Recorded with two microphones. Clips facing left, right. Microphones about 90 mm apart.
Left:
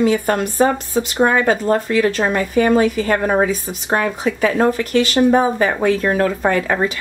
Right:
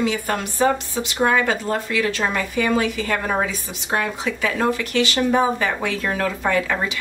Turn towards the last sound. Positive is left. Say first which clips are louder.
# left 4 dB
turn(degrees=45)  # may be behind; listen again after turning